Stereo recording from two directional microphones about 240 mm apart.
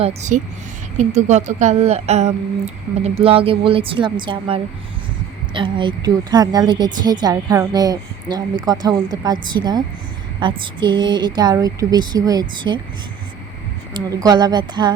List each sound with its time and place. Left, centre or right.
0.0 s a woman's voice: right
13.9 s a woman's voice: centre